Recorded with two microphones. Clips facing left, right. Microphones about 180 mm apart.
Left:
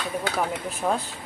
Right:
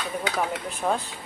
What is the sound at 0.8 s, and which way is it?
Speech, centre (ahead or behind).